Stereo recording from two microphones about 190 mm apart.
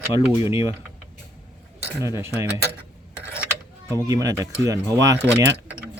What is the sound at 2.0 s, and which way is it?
Speech, 15° right (ahead or behind).